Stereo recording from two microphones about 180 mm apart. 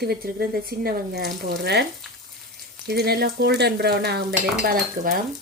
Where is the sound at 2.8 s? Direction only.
65° right (ahead or behind).